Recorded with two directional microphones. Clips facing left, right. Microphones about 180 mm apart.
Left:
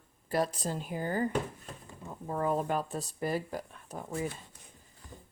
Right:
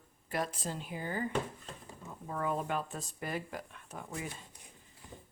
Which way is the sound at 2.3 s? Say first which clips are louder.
Left 4 dB; 35° left (ahead or behind).